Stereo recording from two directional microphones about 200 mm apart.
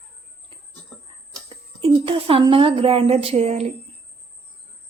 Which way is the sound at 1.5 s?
30° right (ahead or behind).